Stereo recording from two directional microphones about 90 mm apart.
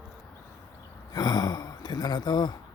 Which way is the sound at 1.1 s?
50° left (ahead or behind).